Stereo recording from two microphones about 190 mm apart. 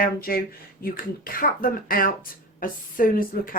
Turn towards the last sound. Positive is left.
turn(degrees=50)  # may be behind; listen again after turning